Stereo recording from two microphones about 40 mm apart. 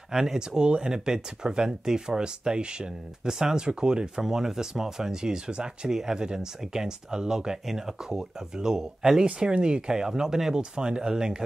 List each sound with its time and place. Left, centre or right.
0.1 s speech: centre